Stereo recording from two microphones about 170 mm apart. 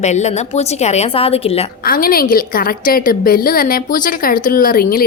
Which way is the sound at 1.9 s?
60° left (ahead or behind).